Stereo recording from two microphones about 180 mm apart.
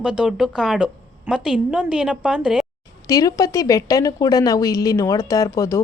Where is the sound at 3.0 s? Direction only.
20° left (ahead or behind).